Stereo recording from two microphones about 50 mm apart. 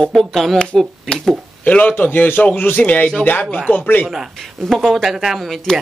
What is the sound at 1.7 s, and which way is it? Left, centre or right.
A man's voice, left.